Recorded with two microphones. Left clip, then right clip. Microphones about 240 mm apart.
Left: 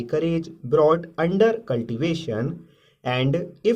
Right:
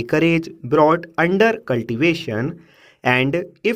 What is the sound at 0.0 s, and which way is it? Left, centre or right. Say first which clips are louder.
Speech: right 6 dB; right.